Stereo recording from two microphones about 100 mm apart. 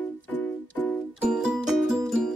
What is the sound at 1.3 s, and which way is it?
Music, 10° right (ahead or behind).